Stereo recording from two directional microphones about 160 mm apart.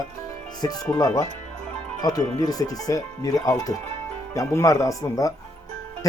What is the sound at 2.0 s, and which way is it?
Speech, 25° left (ahead or behind).